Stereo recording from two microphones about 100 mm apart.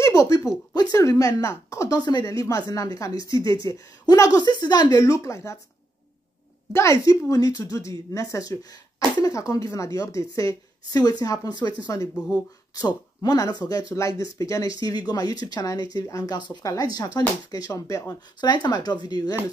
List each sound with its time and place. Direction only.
0.0 s a sound: 30° left (ahead or behind)
0.9 s speech: 35° left (ahead or behind)
2.0 s speech: 45° left (ahead or behind); by 5.6 s 30° left (ahead or behind)
6.7 s speech: 30° left (ahead or behind)
18.4 s speech: 45° left (ahead or behind)